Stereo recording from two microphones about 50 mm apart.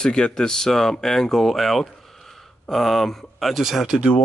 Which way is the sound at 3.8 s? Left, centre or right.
Centre.